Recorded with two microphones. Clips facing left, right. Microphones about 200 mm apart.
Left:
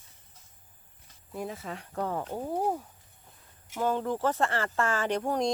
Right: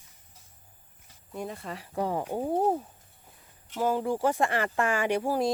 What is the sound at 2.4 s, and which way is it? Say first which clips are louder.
Speech: right 4 dB; 25° right (ahead or behind).